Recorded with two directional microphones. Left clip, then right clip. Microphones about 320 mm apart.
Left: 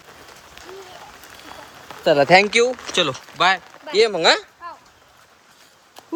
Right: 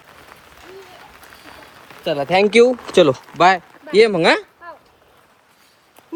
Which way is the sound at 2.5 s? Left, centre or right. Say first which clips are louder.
Right 5 dB; centre.